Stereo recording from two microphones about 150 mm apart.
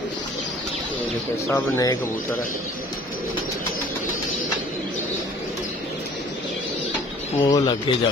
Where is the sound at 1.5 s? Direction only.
20° left (ahead or behind).